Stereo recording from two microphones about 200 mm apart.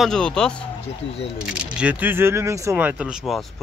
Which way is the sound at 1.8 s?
10° right (ahead or behind).